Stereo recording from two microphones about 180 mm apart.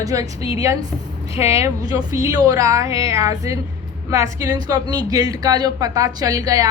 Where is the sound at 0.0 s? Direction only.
20° right (ahead or behind).